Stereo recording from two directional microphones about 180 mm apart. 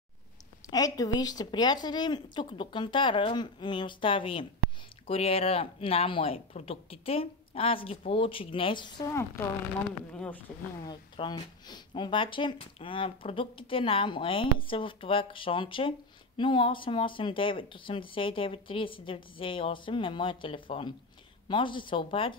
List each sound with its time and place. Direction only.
0.7 s speech: 20° left (ahead or behind)
10.1 s speech: 5° left (ahead or behind)
10.9 s speech: 25° left (ahead or behind)